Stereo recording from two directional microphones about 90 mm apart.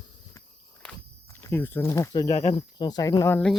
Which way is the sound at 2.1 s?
50° left (ahead or behind).